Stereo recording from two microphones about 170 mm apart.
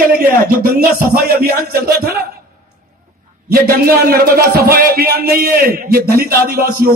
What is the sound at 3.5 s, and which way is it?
A man's voice, 60° right (ahead or behind).